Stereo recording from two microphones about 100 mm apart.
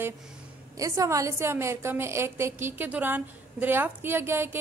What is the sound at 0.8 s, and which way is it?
A woman's voice, 35° right (ahead or behind).